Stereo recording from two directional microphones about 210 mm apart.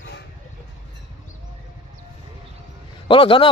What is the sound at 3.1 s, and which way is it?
Speech, 25° left (ahead or behind).